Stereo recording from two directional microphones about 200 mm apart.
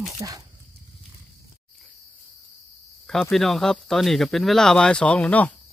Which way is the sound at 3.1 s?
Centre (ahead or behind).